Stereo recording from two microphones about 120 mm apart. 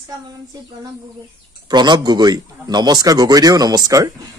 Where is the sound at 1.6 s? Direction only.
35° right (ahead or behind).